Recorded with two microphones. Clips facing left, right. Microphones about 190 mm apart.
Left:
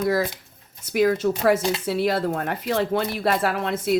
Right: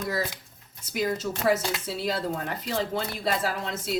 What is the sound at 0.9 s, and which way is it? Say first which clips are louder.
Speech: left 8 dB; 60° left (ahead or behind).